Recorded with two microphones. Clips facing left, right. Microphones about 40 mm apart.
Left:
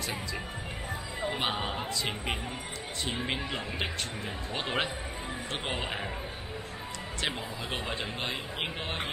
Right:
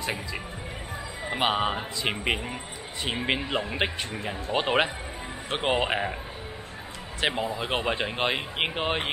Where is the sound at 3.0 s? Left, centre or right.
Right.